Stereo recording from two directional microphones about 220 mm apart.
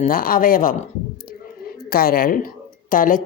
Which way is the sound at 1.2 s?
40° left (ahead or behind).